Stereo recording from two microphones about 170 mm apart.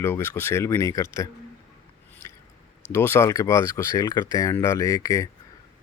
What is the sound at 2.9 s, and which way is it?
Speech, 15° left (ahead or behind).